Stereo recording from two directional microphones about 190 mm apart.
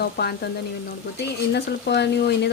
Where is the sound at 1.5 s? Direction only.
65° left (ahead or behind).